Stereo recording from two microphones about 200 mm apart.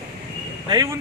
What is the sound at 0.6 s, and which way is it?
Speech, 20° right (ahead or behind).